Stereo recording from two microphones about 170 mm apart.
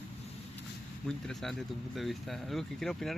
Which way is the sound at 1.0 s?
5° left (ahead or behind).